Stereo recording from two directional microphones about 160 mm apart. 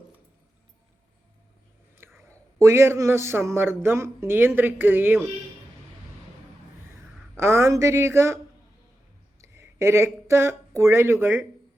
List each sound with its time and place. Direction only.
2.0 s whispering: 15° right (ahead or behind)
2.6 s speech: 15° right (ahead or behind)
7.3 s speech: 15° right (ahead or behind)
9.4 s speech: 15° right (ahead or behind)